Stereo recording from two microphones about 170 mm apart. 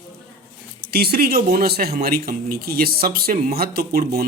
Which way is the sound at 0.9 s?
65° right (ahead or behind).